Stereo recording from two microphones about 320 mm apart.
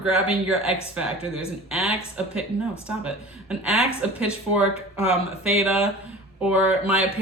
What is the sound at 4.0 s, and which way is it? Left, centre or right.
Speech, centre.